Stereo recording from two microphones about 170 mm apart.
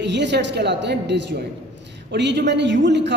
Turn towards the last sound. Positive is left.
turn(degrees=-90)